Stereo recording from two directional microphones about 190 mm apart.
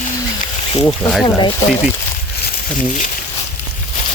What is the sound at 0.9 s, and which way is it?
Speech, 5° left (ahead or behind).